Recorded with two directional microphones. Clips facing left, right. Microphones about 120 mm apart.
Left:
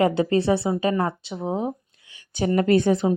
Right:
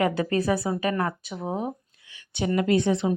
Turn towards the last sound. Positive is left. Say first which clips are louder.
# left 3 dB
turn(degrees=50)  # may be behind; listen again after turning